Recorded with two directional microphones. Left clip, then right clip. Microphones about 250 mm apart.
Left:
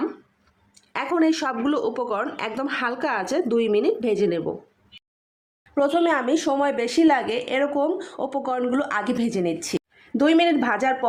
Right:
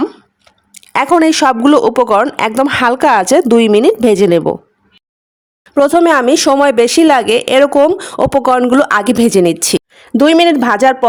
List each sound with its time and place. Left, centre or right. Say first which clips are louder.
0.7 s speech: right 15 dB; right
5.7 s speech: right 12 dB; right